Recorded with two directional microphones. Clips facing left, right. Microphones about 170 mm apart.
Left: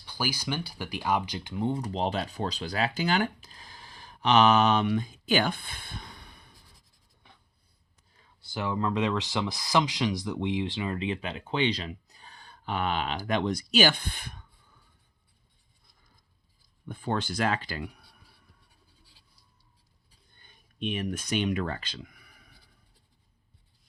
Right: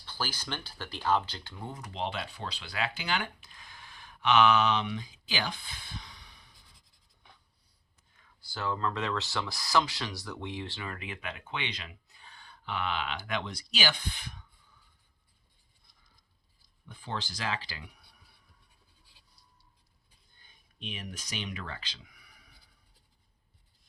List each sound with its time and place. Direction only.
0.0 s speech: 10° left (ahead or behind); by 6.6 s 55° left (ahead or behind)
8.1 s speech: 25° left (ahead or behind); by 14.4 s 55° left (ahead or behind)
16.9 s speech: 55° left (ahead or behind)
20.4 s a sound: 55° left (ahead or behind)